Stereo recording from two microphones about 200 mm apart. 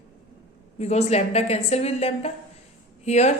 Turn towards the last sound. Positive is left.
turn(degrees=35)  # may be behind; listen again after turning